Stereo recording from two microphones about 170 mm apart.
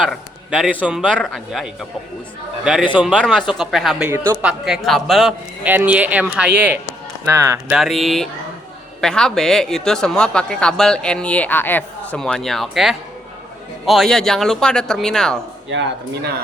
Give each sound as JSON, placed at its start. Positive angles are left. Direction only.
{"t": 0.0, "sound": "a man's voice", "side_deg": 0}
{"t": 3.2, "sound": "speech", "side_deg": 5}
{"t": 7.7, "sound": "speech", "side_deg": 0}
{"t": 15.7, "sound": "speech", "side_deg": -90}